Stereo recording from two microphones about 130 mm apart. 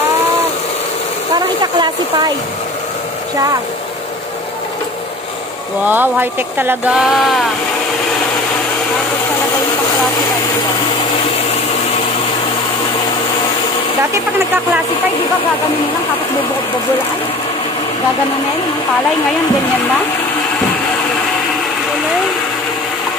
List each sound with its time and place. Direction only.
1.6 s speech: 30° right (ahead or behind)
5.9 s speech: 15° right (ahead or behind)